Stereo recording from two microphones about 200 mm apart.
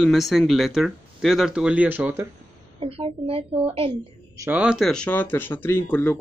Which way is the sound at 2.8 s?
30° right (ahead or behind).